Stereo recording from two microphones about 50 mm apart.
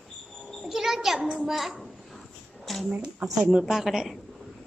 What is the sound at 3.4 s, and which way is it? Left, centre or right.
Speech, centre.